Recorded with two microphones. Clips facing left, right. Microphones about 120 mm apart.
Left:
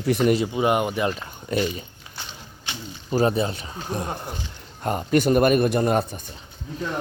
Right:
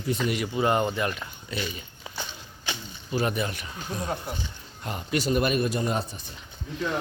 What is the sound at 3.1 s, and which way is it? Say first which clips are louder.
Speech: left 6 dB; 35° left (ahead or behind).